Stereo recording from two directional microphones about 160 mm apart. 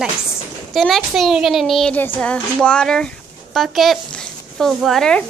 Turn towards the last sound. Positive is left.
turn(degrees=0)  # may be behind; listen again after turning